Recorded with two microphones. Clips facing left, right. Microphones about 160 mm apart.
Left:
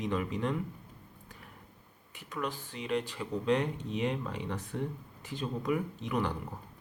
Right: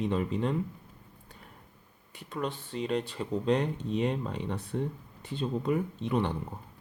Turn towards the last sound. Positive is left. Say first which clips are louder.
# right 3 dB
turn(degrees=-30)  # may be behind; listen again after turning